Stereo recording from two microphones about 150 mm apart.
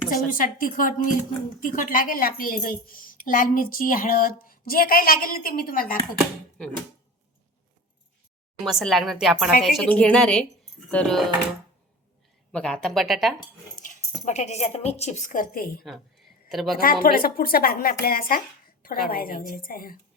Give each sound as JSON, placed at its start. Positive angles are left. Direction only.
{"t": 0.3, "sound": "a woman's voice", "side_deg": 65}
{"t": 8.5, "sound": "a woman's voice", "side_deg": 0}
{"t": 12.5, "sound": "speech", "side_deg": 5}
{"t": 14.3, "sound": "a woman's voice", "side_deg": 50}
{"t": 15.9, "sound": "a woman's voice", "side_deg": 0}
{"t": 16.7, "sound": "a woman's voice", "side_deg": 70}